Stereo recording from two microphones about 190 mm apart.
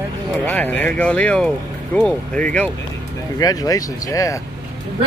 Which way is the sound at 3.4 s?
20° left (ahead or behind).